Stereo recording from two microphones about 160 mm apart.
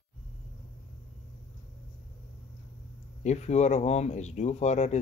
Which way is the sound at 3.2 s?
45° left (ahead or behind).